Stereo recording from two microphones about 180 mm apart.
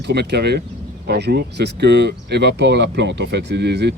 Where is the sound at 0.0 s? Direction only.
70° right (ahead or behind).